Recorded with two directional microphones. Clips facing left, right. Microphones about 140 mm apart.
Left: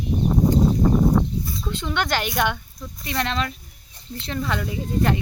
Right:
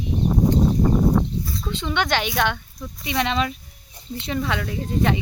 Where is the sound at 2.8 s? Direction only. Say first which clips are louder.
Right 3 dB; 5° right (ahead or behind).